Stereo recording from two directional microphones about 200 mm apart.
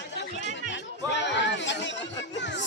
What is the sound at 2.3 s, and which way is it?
Music, 60° left (ahead or behind).